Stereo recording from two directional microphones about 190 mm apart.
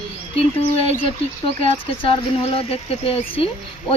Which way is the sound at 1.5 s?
30° left (ahead or behind).